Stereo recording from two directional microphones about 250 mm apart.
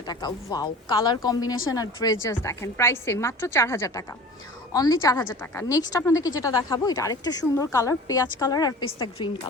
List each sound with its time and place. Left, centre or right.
0.1 s a woman's voice: centre